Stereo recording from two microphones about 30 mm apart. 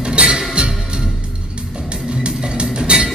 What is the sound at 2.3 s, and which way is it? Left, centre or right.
Music, right.